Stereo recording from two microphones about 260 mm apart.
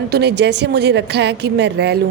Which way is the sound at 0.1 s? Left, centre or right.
Right.